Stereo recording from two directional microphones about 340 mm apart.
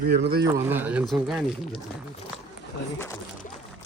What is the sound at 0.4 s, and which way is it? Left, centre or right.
Speech, centre.